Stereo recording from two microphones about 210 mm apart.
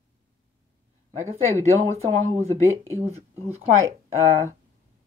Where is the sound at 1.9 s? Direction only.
30° right (ahead or behind).